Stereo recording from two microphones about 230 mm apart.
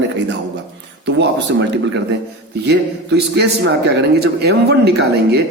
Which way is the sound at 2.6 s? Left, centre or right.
Right.